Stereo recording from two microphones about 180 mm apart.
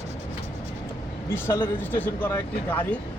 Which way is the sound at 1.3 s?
10° left (ahead or behind).